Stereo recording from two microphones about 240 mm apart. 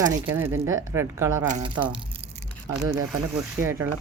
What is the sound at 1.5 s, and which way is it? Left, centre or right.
Speech, right.